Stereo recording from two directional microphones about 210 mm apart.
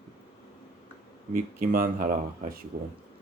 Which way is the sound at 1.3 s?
40° right (ahead or behind).